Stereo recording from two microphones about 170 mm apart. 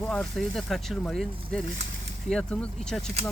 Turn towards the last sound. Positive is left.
turn(degrees=5)  # may be behind; listen again after turning